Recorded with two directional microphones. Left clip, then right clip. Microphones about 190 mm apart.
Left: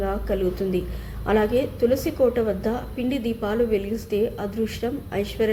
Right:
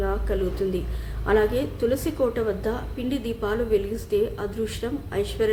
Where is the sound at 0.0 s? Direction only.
10° left (ahead or behind).